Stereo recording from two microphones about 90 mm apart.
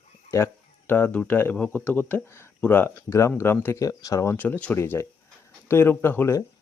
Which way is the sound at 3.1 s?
30° left (ahead or behind).